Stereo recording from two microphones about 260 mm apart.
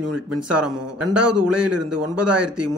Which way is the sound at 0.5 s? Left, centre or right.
Right.